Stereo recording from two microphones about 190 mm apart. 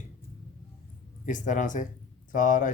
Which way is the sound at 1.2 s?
40° left (ahead or behind).